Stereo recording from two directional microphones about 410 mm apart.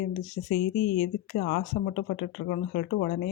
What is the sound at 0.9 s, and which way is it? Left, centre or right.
Speech, left.